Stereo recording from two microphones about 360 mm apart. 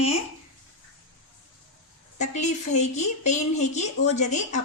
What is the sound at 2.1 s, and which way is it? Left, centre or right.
Speech, centre.